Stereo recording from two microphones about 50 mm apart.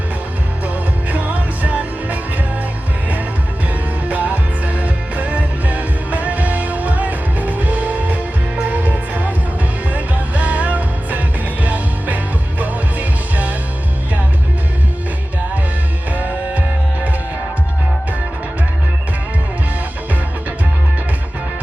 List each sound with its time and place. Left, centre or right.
1.1 s music: right
4.1 s music: right
16.1 s music: right